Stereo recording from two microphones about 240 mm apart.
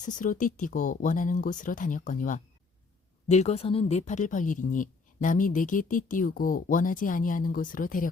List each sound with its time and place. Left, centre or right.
0.0 s speech: left